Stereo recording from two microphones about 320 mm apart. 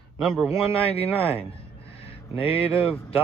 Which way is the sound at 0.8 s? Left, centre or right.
Centre.